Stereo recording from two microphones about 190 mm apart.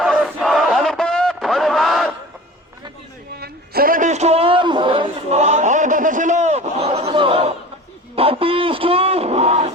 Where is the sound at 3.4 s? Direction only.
50° right (ahead or behind).